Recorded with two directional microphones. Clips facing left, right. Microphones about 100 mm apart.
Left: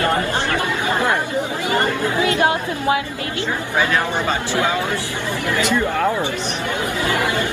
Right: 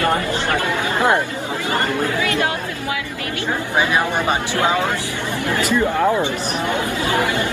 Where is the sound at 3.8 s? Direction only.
15° right (ahead or behind).